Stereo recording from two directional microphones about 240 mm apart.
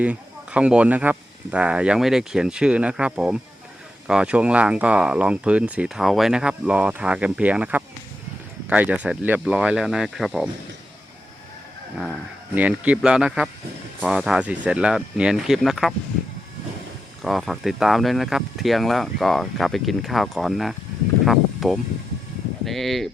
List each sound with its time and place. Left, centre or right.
0.0 s speech: centre
11.9 s speech: centre
17.2 s speech: centre